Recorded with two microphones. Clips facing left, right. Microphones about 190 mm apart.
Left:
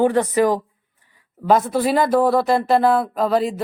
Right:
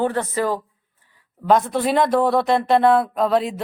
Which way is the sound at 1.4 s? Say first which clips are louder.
Left 1 dB; 5° left (ahead or behind).